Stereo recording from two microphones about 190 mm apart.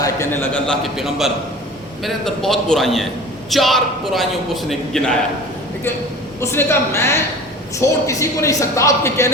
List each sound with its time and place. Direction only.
0.0 s a man's voice: 15° left (ahead or behind)
6.4 s speech: 10° left (ahead or behind)